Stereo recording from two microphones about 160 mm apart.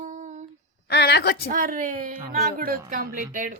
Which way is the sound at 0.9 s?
90° left.